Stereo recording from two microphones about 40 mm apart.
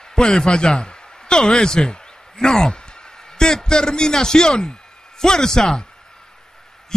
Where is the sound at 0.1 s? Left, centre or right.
Centre.